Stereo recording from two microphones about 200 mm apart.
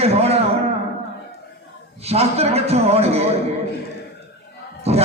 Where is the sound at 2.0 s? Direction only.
30° right (ahead or behind).